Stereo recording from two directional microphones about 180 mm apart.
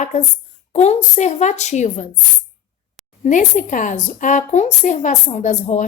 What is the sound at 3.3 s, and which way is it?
Speech, 45° left (ahead or behind).